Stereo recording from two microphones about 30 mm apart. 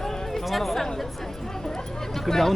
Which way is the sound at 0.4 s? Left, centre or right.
Centre.